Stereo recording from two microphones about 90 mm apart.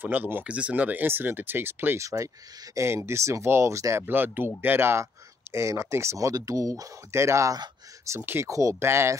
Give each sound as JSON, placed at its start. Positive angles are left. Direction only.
{"t": 0.0, "sound": "speech", "side_deg": -20}
{"t": 4.0, "sound": "speech", "side_deg": -20}